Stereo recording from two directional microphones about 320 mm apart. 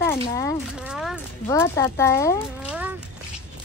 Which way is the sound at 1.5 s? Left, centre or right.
Centre.